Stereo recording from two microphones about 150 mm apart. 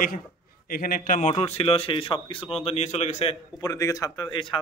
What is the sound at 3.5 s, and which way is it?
Speech, 25° left (ahead or behind).